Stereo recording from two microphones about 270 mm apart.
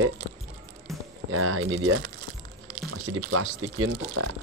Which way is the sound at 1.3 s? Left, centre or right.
Right.